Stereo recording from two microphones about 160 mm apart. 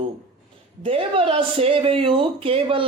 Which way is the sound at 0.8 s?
35° right (ahead or behind).